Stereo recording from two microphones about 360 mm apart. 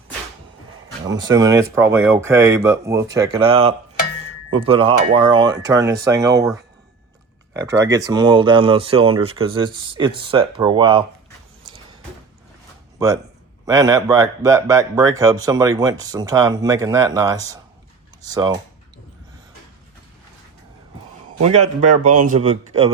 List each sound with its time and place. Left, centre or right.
1.0 s speech: centre
7.5 s speech: centre
13.7 s speech: centre
21.3 s speech: centre